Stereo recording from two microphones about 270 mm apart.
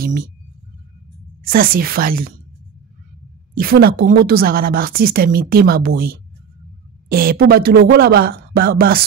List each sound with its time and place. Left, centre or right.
1.5 s a woman's voice: right
3.5 s a woman's voice: right